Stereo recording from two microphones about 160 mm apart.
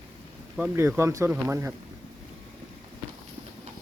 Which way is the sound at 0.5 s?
10° right (ahead or behind).